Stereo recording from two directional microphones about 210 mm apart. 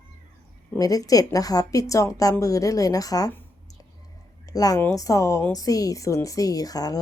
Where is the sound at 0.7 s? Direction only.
15° left (ahead or behind).